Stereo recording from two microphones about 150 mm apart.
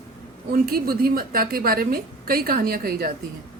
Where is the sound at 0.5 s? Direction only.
85° right.